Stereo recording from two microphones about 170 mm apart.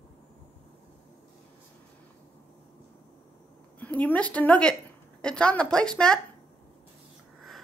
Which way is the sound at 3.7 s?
10° left (ahead or behind).